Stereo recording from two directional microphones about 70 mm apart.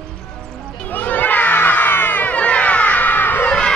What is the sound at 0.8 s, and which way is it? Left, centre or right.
Crowd, left.